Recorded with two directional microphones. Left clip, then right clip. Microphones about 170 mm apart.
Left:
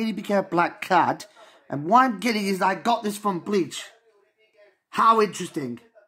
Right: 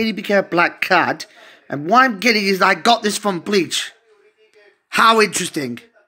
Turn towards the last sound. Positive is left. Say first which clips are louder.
# right 8 dB
turn(degrees=-10)  # may be behind; listen again after turning